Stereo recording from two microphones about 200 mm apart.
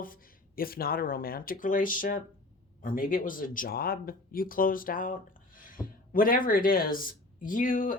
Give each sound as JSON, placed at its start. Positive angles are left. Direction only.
{"t": 0.0, "sound": "speech", "side_deg": 45}